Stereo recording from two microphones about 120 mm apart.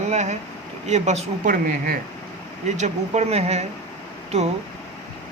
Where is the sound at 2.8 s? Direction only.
70° right (ahead or behind).